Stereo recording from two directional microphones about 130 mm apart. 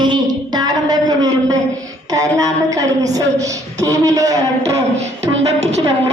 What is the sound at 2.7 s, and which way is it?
A woman's voice, 25° right (ahead or behind).